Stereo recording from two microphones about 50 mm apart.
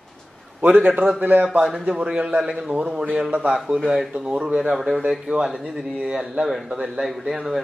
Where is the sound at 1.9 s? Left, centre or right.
Right.